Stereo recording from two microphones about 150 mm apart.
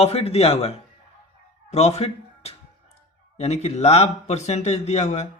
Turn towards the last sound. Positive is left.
turn(degrees=45)  # may be behind; listen again after turning